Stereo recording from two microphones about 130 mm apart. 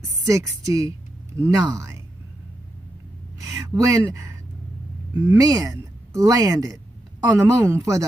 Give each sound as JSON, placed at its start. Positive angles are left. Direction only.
{"t": 0.3, "sound": "a woman's voice", "side_deg": -25}
{"t": 3.3, "sound": "a sound", "side_deg": -25}
{"t": 5.1, "sound": "speech", "side_deg": -20}